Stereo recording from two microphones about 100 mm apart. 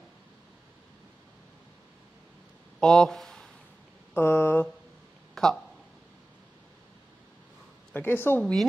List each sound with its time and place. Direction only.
2.8 s speech: 5° left (ahead or behind)
4.1 s speech: 20° left (ahead or behind)
5.3 s a sound: 5° left (ahead or behind)
7.9 s speech: 20° left (ahead or behind)